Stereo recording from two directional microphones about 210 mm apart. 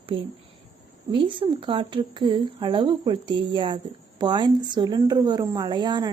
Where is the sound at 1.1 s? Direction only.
25° right (ahead or behind).